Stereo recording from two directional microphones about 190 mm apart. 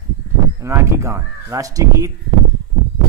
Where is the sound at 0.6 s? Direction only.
15° right (ahead or behind).